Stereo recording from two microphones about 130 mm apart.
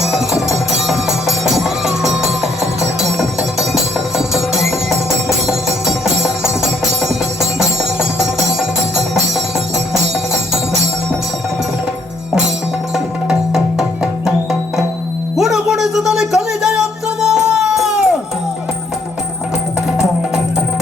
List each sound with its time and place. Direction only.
0.1 s music: 5° right (ahead or behind)
5.5 s music: 5° right (ahead or behind)
12.9 s music: 5° right (ahead or behind)
15.4 s a sound: 5° right (ahead or behind)